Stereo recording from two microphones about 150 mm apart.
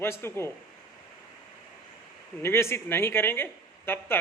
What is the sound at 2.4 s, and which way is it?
A man's voice, 15° left (ahead or behind).